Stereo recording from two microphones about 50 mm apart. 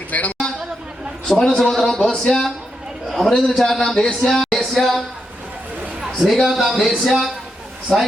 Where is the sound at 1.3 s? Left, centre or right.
Centre.